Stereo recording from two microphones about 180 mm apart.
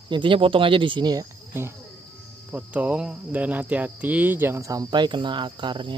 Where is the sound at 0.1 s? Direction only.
30° right (ahead or behind).